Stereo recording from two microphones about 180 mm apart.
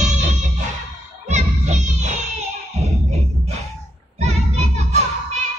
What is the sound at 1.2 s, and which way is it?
Music, 40° right (ahead or behind).